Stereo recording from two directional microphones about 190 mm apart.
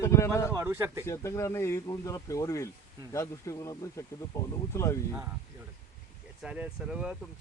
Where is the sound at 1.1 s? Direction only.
15° left (ahead or behind).